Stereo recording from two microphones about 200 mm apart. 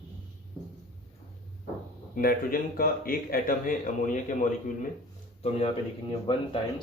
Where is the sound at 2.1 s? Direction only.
45° left (ahead or behind).